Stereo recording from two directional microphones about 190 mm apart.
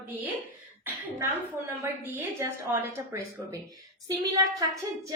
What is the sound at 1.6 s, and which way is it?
Speech, 10° right (ahead or behind).